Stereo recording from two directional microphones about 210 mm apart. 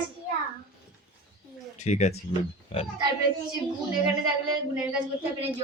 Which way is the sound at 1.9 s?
30° left (ahead or behind).